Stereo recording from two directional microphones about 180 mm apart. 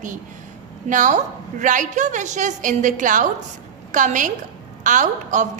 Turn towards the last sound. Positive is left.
turn(degrees=-45)  # may be behind; listen again after turning